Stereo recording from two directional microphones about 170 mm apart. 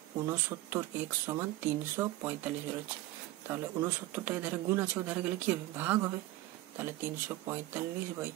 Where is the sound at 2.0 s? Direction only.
10° right (ahead or behind).